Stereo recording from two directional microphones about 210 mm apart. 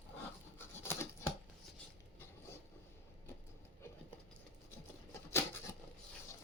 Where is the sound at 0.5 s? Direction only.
10° left (ahead or behind).